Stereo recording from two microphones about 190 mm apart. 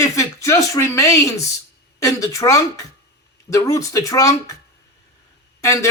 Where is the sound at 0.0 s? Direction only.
15° left (ahead or behind).